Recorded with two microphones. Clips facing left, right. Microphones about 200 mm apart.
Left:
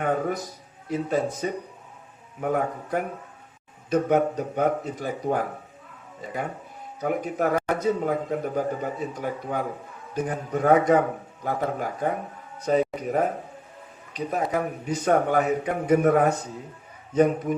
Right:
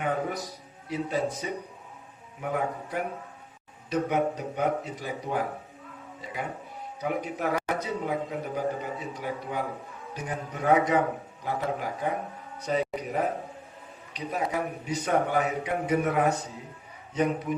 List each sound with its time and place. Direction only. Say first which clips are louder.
0.4 s a man's voice: left 3 dB; 50° left (ahead or behind)